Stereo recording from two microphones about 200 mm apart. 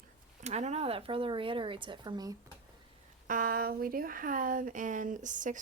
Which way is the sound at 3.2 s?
45° right (ahead or behind).